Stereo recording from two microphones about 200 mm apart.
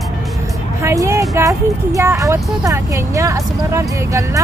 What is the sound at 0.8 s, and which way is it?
Speech, 15° right (ahead or behind).